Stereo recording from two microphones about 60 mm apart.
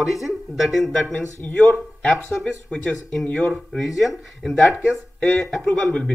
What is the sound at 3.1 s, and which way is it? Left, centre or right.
Speech, centre.